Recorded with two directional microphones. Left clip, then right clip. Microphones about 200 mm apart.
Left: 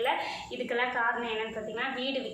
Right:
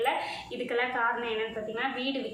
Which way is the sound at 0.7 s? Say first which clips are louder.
Even; 5° right (ahead or behind).